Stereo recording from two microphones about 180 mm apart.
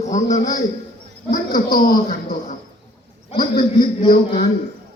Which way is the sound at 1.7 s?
50° left (ahead or behind).